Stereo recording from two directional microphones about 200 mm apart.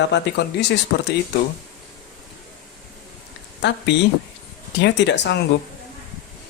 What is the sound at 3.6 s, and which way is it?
Speech, 60° left (ahead or behind).